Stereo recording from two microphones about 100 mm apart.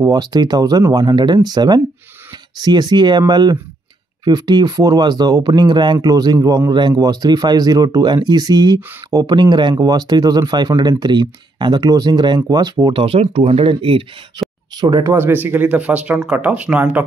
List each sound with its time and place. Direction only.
0.0 s speech: 40° right (ahead or behind)
5.9 s a man's voice: 40° right (ahead or behind)
13.0 s speech: 70° right (ahead or behind)
14.8 s speech: 40° right (ahead or behind)
15.1 s speech: 20° right (ahead or behind)